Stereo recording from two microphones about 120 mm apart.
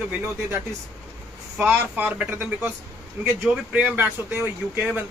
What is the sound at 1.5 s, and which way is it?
A man's voice, 10° right (ahead or behind).